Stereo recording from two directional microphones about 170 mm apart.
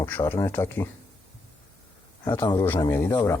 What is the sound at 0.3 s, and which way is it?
Speech, 15° left (ahead or behind).